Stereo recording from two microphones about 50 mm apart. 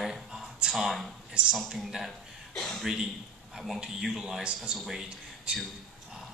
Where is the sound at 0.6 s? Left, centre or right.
Centre.